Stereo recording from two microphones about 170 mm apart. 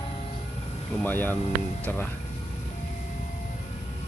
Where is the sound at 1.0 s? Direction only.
10° left (ahead or behind).